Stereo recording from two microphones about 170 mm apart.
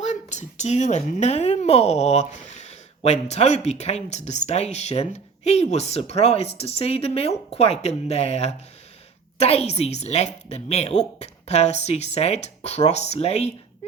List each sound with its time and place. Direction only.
0.0 s a child's voice: 45° left (ahead or behind)